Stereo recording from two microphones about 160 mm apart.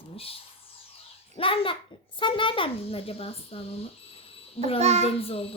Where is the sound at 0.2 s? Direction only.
35° left (ahead or behind).